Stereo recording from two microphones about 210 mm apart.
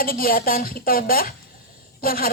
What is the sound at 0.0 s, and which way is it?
Speech, 45° left (ahead or behind).